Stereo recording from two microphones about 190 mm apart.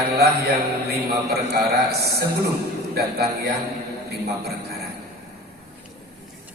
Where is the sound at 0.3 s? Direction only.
55° right (ahead or behind).